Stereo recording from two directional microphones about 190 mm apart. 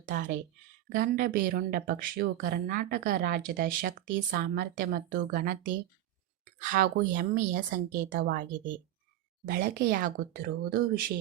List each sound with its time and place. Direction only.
0.0 s speech: 45° right (ahead or behind)
9.5 s speech: 60° right (ahead or behind)